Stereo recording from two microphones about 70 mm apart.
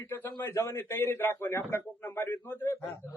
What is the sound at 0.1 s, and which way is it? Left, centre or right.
Speech, left.